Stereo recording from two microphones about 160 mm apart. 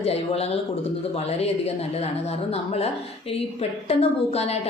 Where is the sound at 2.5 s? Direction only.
40° left (ahead or behind).